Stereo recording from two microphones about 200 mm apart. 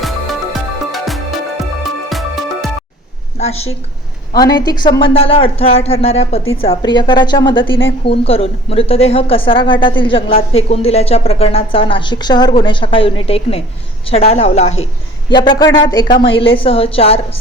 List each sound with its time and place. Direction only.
0.0 s music: centre (ahead or behind)
3.3 s a woman's voice: 30° left (ahead or behind)
4.4 s speech: 20° left (ahead or behind)
7.7 s speech: 70° left (ahead or behind)
8.0 s speech: 30° left (ahead or behind)
15.3 s speech: 20° left (ahead or behind)